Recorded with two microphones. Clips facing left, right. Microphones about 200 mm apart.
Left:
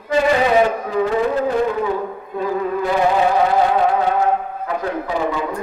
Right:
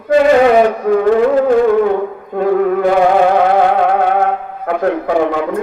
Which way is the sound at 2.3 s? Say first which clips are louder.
Right 8 dB; 65° right (ahead or behind).